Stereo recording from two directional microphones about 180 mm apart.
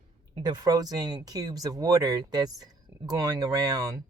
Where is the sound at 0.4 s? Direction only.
20° right (ahead or behind).